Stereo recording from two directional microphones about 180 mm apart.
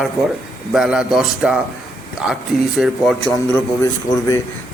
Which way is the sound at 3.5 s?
15° left (ahead or behind).